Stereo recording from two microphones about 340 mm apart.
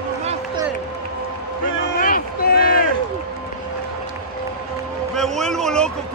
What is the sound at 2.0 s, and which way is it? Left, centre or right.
Run, left.